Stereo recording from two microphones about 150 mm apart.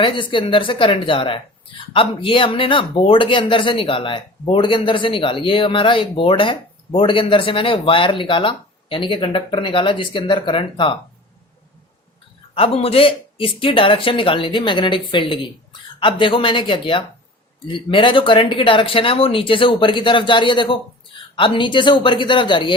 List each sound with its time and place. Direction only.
0.0 s speech: 35° left (ahead or behind)
12.5 s speech: 40° left (ahead or behind)